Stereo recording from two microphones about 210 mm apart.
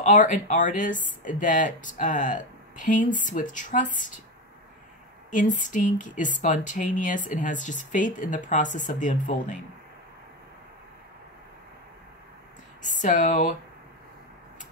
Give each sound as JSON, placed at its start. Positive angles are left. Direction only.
{"t": 0.0, "sound": "speech", "side_deg": 40}
{"t": 5.3, "sound": "speech", "side_deg": 35}
{"t": 12.8, "sound": "speech", "side_deg": 35}